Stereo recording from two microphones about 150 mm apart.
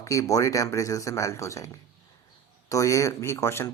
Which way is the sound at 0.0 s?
20° left (ahead or behind).